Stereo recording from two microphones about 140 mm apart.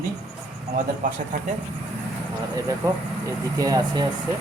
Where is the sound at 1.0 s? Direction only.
70° right (ahead or behind).